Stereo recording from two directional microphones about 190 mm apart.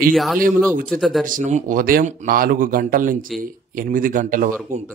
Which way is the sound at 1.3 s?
40° right (ahead or behind).